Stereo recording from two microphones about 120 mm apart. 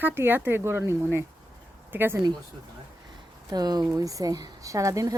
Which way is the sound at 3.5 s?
35° right (ahead or behind).